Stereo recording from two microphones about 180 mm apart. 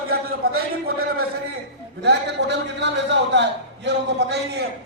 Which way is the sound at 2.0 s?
70° right (ahead or behind).